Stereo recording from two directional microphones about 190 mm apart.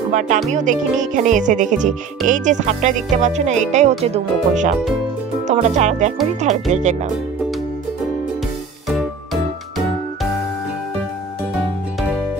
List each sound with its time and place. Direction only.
0.5 s speech: 40° right (ahead or behind)
8.8 s music: centre (ahead or behind)